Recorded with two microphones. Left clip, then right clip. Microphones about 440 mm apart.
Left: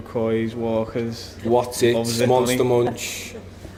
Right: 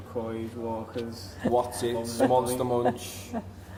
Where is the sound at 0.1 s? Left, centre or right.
Left.